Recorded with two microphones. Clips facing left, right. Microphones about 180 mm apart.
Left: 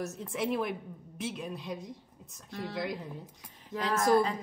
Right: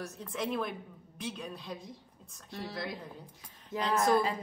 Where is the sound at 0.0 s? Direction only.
25° left (ahead or behind).